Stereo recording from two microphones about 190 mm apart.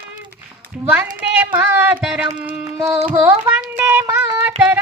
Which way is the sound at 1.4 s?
10° right (ahead or behind).